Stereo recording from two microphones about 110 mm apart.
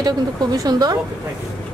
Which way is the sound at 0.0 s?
35° right (ahead or behind).